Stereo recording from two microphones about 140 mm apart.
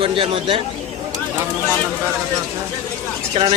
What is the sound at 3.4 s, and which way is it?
Speech, 45° right (ahead or behind).